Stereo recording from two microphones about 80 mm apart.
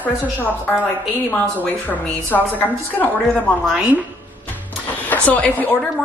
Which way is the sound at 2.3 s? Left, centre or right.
Left.